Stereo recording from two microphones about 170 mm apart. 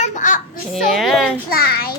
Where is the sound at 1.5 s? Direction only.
60° left (ahead or behind).